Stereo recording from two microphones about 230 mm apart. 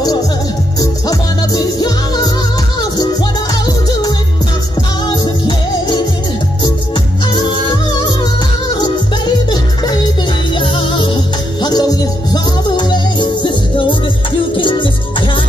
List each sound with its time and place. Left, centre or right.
0.7 s music: centre
8.7 s music: centre